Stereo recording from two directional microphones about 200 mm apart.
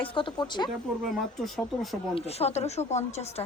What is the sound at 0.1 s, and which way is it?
Speech, 25° left (ahead or behind).